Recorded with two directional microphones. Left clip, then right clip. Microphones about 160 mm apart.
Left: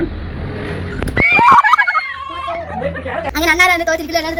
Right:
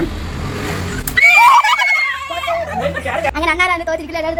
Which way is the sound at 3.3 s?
Centre (ahead or behind).